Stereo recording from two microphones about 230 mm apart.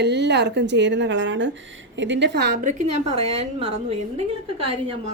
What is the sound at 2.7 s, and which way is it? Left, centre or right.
A woman's voice, right.